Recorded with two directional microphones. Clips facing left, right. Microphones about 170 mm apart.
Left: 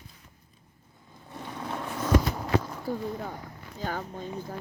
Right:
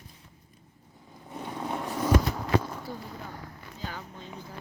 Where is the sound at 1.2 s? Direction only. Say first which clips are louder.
Right 2 dB; 15° right (ahead or behind).